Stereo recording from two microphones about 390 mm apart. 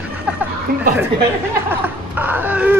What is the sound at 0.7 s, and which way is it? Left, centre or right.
Speech, right.